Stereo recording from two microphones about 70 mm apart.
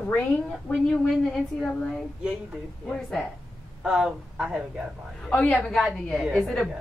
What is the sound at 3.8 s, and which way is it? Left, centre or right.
Speech, centre.